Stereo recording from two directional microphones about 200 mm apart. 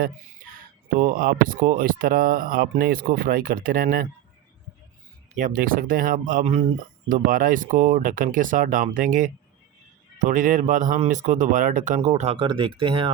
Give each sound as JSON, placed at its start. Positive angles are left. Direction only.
{"t": 0.9, "sound": "speech", "side_deg": -45}
{"t": 5.4, "sound": "speech", "side_deg": -45}
{"t": 7.1, "sound": "speech", "side_deg": -45}